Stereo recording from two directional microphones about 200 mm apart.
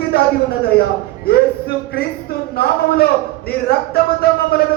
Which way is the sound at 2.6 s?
50° left (ahead or behind).